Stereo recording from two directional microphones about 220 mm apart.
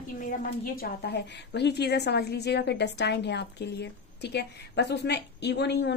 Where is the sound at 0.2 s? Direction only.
40° left (ahead or behind).